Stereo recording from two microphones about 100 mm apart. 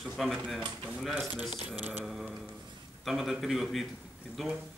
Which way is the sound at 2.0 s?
Centre (ahead or behind).